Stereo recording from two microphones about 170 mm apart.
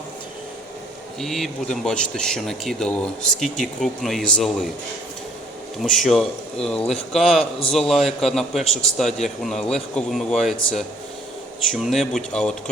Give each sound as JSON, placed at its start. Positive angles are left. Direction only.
{"t": 1.2, "sound": "a man's voice", "side_deg": 0}
{"t": 5.8, "sound": "a man's voice", "side_deg": 0}